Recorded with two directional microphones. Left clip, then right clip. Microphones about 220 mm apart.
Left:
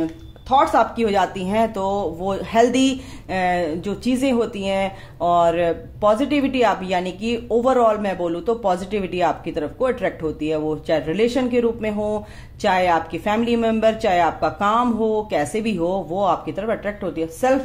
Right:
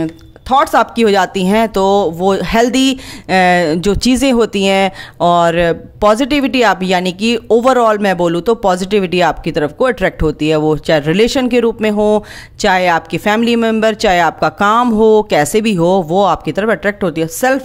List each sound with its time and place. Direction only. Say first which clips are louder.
0.5 s speech: right 5 dB; 50° right (ahead or behind)